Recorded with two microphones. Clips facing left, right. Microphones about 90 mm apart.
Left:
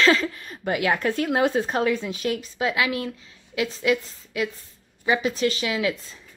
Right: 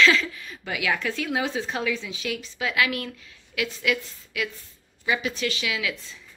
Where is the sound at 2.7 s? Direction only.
25° left (ahead or behind).